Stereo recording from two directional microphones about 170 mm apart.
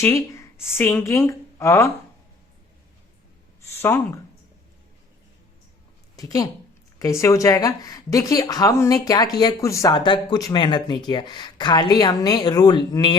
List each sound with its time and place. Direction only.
0.0 s a woman's voice: 15° left (ahead or behind)
3.6 s speech: 15° left (ahead or behind)
6.1 s a woman's voice: 20° left (ahead or behind)